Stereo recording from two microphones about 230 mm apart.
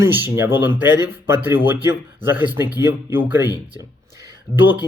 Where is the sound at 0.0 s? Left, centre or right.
Centre.